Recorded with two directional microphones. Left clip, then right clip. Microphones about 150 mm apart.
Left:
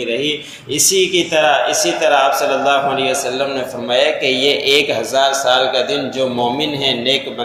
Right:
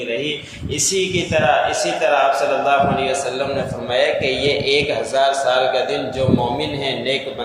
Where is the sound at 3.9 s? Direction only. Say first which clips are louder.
Left 3 dB; 25° left (ahead or behind).